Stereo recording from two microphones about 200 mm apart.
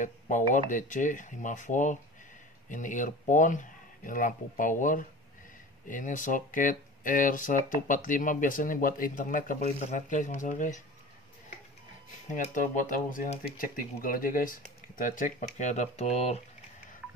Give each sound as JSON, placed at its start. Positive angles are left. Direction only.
{"t": 0.0, "sound": "speech", "side_deg": 40}
{"t": 12.3, "sound": "speech", "side_deg": 40}